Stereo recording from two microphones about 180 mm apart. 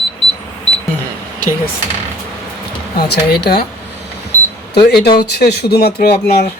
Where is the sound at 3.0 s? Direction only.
60° left (ahead or behind).